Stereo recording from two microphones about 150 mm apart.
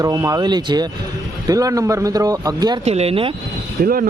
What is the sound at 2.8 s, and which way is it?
Speech, 45° right (ahead or behind).